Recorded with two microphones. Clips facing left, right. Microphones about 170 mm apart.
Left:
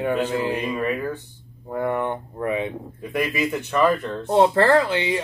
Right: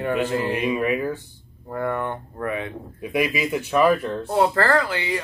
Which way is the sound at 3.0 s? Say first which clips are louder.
Right 1 dB; 10° right (ahead or behind).